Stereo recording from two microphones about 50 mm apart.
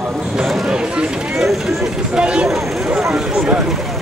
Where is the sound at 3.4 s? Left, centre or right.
Centre.